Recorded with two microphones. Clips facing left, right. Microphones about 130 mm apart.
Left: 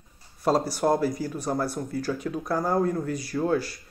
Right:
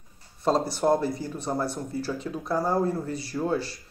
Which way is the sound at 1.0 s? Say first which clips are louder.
Left 2 dB; 25° right (ahead or behind).